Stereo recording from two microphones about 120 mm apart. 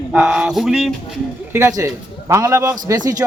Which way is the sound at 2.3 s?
25° right (ahead or behind).